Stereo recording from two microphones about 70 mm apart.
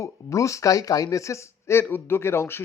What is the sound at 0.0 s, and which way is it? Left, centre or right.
Speech, left.